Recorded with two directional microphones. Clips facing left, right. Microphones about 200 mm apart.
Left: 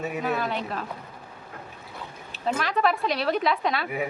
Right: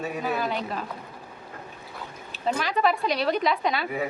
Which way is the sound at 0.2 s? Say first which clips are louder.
Even; centre (ahead or behind).